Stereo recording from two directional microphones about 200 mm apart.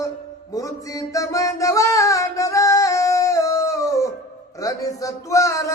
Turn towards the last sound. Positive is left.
turn(degrees=15)  # may be behind; listen again after turning